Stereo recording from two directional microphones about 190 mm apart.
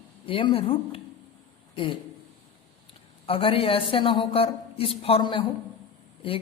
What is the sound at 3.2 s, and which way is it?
Speech, 30° left (ahead or behind).